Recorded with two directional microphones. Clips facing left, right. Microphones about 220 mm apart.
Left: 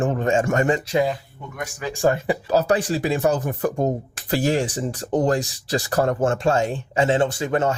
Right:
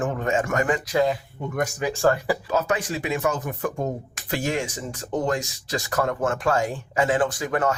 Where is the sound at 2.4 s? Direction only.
35° left (ahead or behind).